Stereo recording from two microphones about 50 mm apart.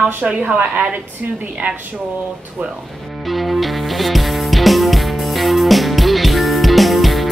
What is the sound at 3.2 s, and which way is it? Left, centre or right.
Music, centre.